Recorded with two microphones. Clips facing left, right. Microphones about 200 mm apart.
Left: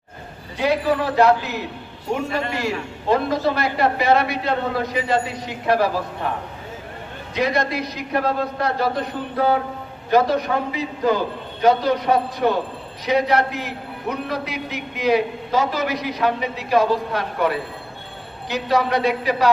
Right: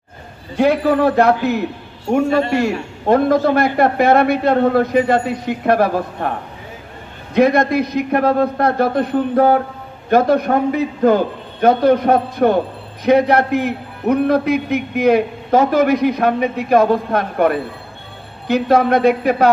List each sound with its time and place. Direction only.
0.5 s a man's voice: 55° right (ahead or behind)
2.5 s a man's voice: 55° right (ahead or behind)
7.3 s a man's voice: 55° right (ahead or behind)